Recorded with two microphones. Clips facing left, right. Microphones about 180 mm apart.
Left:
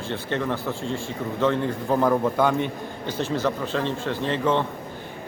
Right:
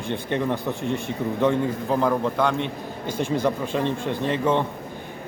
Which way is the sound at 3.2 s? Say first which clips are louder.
Right 2 dB; 10° right (ahead or behind).